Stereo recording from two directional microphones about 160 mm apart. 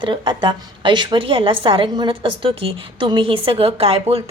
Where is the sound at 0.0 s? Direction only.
30° right (ahead or behind).